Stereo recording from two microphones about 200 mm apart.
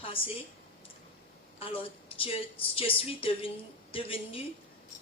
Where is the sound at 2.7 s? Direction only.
30° left (ahead or behind).